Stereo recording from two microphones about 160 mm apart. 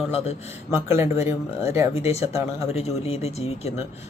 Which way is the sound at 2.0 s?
40° left (ahead or behind).